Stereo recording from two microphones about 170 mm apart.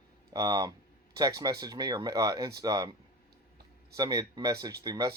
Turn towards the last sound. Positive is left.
turn(degrees=-20)  # may be behind; listen again after turning